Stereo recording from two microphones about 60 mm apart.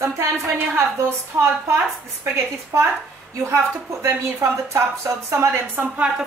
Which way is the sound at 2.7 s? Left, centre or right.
Right.